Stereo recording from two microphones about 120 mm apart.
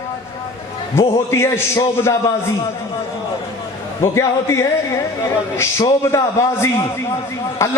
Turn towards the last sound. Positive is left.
turn(degrees=20)  # may be behind; listen again after turning